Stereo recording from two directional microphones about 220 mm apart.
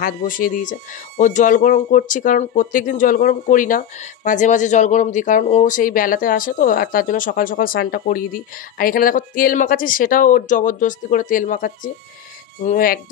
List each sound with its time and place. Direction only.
0.0 s speech: 40° left (ahead or behind)